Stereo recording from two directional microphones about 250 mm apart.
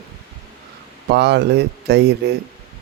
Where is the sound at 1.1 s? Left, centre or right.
Right.